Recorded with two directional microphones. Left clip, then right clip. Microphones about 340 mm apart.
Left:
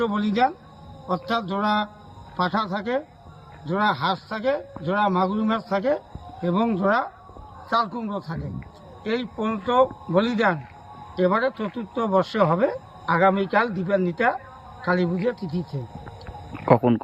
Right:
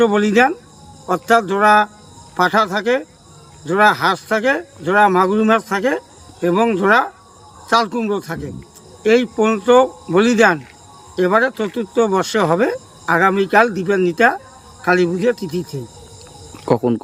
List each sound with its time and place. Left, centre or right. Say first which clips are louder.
0.0 s speech: right 9 dB; right
14.8 s speech: right 8 dB; right
16.6 s speech: right 2 dB; centre